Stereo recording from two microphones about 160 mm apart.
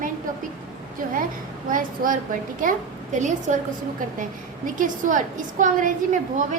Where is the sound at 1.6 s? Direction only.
60° right (ahead or behind).